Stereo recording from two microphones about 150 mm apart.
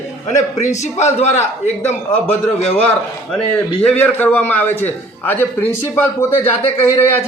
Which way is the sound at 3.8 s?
10° left (ahead or behind).